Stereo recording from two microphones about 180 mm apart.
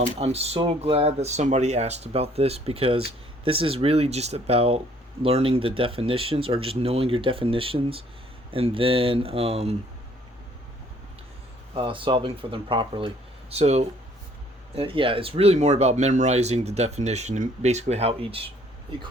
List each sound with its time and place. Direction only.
0.0 s speech: 35° right (ahead or behind)
11.7 s speech: 30° right (ahead or behind)